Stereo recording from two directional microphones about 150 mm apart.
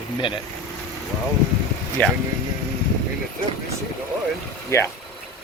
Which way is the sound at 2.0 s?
10° left (ahead or behind).